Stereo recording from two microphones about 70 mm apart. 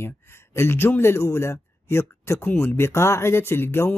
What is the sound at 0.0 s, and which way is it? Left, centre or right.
Speech, left.